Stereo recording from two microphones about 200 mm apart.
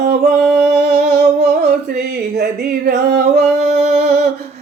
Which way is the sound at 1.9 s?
50° right (ahead or behind).